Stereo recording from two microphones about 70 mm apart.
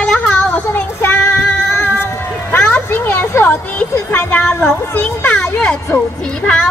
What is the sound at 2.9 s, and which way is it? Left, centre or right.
Speech, left.